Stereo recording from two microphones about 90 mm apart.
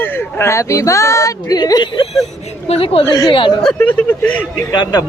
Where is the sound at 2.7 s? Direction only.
90° left.